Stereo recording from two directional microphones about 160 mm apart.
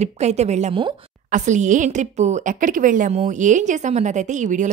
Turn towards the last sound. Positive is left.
turn(degrees=-50)  # may be behind; listen again after turning